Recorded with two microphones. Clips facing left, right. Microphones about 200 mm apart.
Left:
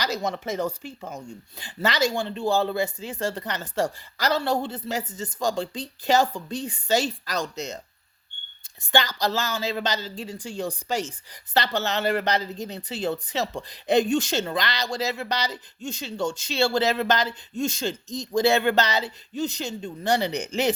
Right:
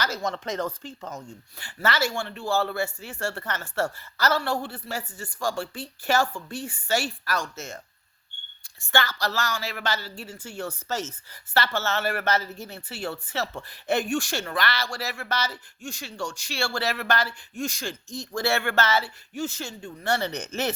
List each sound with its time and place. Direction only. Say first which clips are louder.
0.0 s a man's voice: left 2 dB; 15° left (ahead or behind)
8.9 s a man's voice: left 3 dB; 20° left (ahead or behind)